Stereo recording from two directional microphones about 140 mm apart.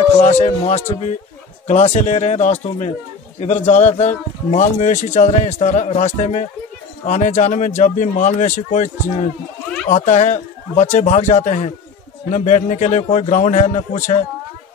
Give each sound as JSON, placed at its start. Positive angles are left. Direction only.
{"t": 0.2, "sound": "a man's voice", "side_deg": 55}